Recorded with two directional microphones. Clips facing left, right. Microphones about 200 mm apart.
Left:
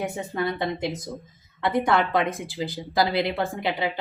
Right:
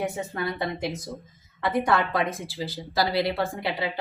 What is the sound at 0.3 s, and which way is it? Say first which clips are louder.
Speech: left 3 dB; 20° left (ahead or behind).